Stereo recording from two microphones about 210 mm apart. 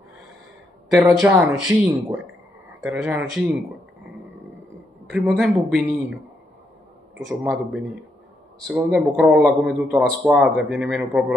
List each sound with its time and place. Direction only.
0.8 s a man's voice: centre (ahead or behind)
5.3 s a man's voice: centre (ahead or behind)
7.2 s a man's voice: centre (ahead or behind)